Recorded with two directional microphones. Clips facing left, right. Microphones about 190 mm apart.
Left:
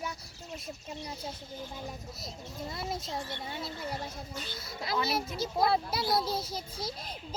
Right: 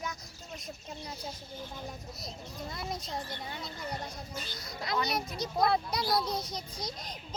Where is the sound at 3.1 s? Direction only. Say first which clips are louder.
Left 1 dB; 25° left (ahead or behind).